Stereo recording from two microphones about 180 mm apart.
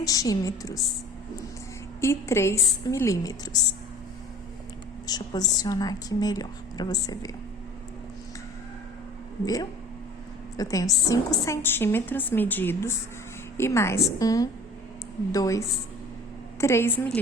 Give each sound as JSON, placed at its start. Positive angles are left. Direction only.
{"t": 0.0, "sound": "a woman's voice", "side_deg": 20}
{"t": 2.0, "sound": "a woman's voice", "side_deg": 15}
{"t": 5.0, "sound": "a woman's voice", "side_deg": 20}
{"t": 10.6, "sound": "a woman's voice", "side_deg": 20}